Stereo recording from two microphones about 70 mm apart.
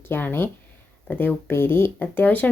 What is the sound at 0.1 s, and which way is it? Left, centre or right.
Speech, left.